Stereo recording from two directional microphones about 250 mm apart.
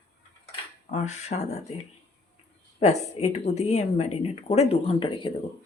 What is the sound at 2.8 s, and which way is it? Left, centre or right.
Speech, left.